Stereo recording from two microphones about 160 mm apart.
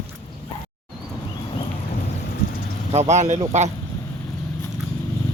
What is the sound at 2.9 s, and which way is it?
Speech, 45° right (ahead or behind).